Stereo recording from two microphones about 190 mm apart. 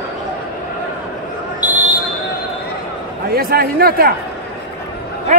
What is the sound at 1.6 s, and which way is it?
Basketball bounce, 10° right (ahead or behind).